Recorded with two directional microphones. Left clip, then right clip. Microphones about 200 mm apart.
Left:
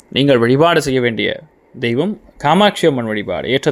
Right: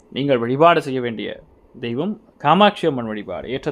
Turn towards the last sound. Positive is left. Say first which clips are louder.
# left 9 dB
turn(degrees=25)  # may be behind; listen again after turning